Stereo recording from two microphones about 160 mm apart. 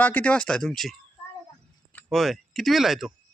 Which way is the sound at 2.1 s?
Centre (ahead or behind).